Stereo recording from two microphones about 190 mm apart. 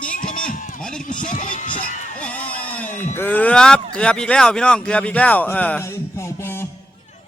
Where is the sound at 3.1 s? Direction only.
10° left (ahead or behind).